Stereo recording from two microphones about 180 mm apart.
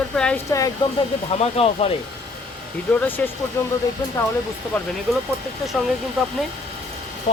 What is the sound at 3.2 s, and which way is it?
Speech, 10° left (ahead or behind).